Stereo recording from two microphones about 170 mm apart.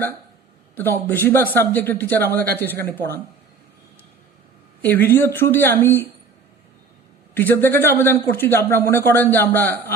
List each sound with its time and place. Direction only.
0.8 s a man's voice: 10° left (ahead or behind)
4.8 s a man's voice: 10° left (ahead or behind)
7.3 s a man's voice: 10° left (ahead or behind)